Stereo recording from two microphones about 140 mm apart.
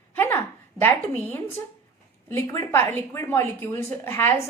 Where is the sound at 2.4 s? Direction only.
15° left (ahead or behind).